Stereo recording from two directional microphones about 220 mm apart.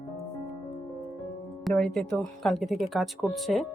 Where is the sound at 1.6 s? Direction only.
Centre (ahead or behind).